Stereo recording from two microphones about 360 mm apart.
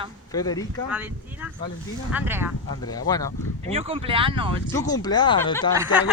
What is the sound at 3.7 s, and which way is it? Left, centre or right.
Speech, centre.